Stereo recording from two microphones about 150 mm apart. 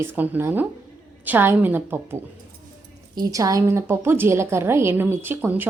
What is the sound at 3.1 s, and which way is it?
A woman's voice, 25° right (ahead or behind).